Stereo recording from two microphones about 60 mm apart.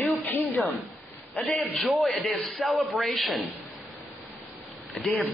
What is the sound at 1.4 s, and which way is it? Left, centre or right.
Speech, left.